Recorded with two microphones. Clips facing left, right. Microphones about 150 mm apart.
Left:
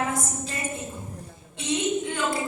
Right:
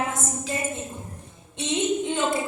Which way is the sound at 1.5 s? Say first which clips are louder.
Right 1 dB; 20° right (ahead or behind).